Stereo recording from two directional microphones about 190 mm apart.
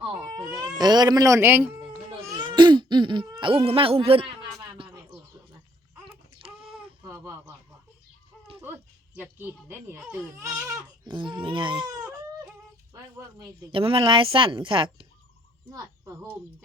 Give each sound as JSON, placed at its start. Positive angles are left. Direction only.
{"t": 0.0, "sound": "baby cry", "side_deg": -20}
{"t": 0.8, "sound": "speech", "side_deg": -20}
{"t": 1.9, "sound": "baby cry", "side_deg": -15}
{"t": 4.8, "sound": "a sound", "side_deg": -30}
{"t": 6.4, "sound": "a sound", "side_deg": -30}
{"t": 7.0, "sound": "a sound", "side_deg": -10}
{"t": 9.1, "sound": "speech", "side_deg": -10}
{"t": 11.0, "sound": "speech", "side_deg": -25}
{"t": 13.4, "sound": "speech", "side_deg": -30}